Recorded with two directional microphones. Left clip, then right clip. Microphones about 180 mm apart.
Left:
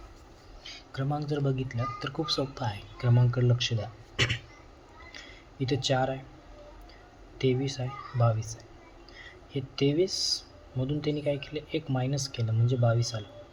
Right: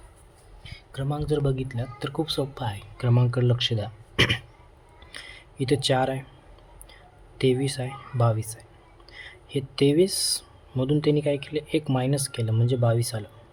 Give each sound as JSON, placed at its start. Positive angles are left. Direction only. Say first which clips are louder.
{"t": 0.9, "sound": "a man's voice", "louder": "right 5 dB", "side_deg": -20}
{"t": 5.1, "sound": "a sound", "louder": "right 7 dB", "side_deg": -25}
{"t": 7.3, "sound": "a man's voice", "louder": "right 5 dB", "side_deg": -25}